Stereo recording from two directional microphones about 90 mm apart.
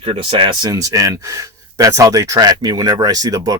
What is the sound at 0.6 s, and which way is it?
Speech, 45° right (ahead or behind).